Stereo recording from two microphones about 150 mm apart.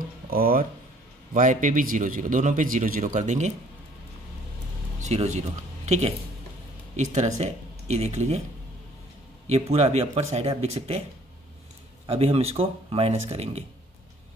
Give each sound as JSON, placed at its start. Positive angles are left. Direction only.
{"t": 0.3, "sound": "speech", "side_deg": -80}
{"t": 1.3, "sound": "a man's voice", "side_deg": -60}
{"t": 5.0, "sound": "speech", "side_deg": -50}
{"t": 7.3, "sound": "speech", "side_deg": -45}
{"t": 9.5, "sound": "speech", "side_deg": -45}
{"t": 12.1, "sound": "speech", "side_deg": -40}